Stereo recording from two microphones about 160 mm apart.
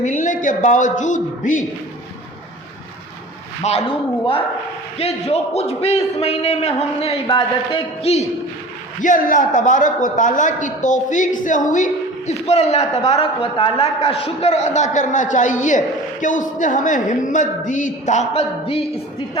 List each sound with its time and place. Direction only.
0.0 s a man's voice: 50° left (ahead or behind)
3.6 s a man's voice: 40° left (ahead or behind)
9.0 s a man's voice: 55° left (ahead or behind); by 18.9 s 40° left (ahead or behind)